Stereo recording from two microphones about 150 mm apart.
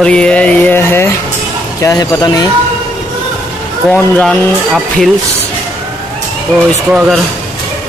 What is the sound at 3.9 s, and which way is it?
Speech, centre (ahead or behind).